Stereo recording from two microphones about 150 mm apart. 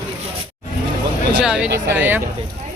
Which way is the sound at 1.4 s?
5° right (ahead or behind).